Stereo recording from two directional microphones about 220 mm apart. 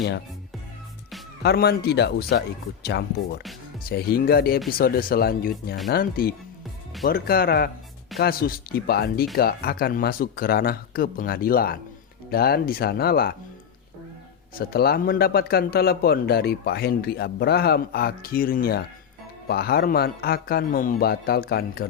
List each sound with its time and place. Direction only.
1.4 s a man's voice: 45° left (ahead or behind)
3.8 s a man's voice: 40° left (ahead or behind)
14.6 s a man's voice: 45° left (ahead or behind)